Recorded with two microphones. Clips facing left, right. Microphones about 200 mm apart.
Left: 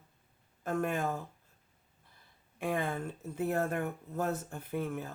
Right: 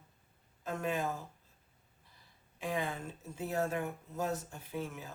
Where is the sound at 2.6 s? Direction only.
55° left (ahead or behind).